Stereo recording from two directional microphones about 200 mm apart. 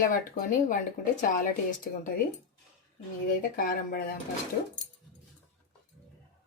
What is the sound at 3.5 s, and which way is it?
Speech, 45° left (ahead or behind).